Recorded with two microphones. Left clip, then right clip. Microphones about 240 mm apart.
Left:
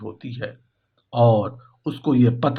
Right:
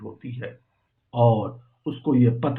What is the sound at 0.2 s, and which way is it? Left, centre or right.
Speech, left.